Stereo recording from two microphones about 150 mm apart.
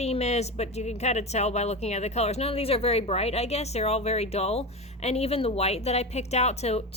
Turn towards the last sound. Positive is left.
turn(degrees=45)  # may be behind; listen again after turning